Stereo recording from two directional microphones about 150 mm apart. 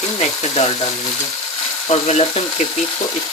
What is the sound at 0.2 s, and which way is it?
Cutlery, 50° left (ahead or behind).